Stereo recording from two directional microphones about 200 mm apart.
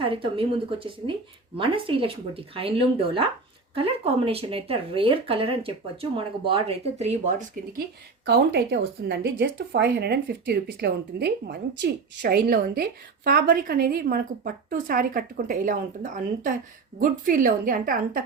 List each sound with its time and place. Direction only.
0.0 s speech: 25° right (ahead or behind); by 7.9 s 40° right (ahead or behind)
8.3 s speech: 50° right (ahead or behind)